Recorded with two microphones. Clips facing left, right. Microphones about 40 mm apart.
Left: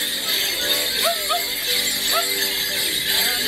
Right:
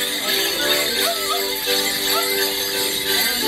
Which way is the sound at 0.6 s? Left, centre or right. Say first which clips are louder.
Right 3 dB; right.